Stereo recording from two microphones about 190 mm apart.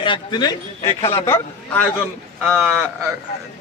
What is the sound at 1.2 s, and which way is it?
Speech, 10° left (ahead or behind).